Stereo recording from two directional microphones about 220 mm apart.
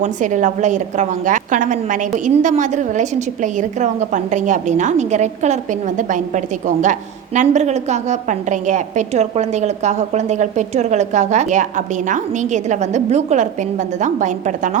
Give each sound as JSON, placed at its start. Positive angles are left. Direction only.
{"t": 0.0, "sound": "a woman's voice", "side_deg": -35}